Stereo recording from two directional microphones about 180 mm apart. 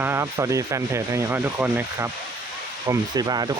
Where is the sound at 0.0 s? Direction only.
15° right (ahead or behind).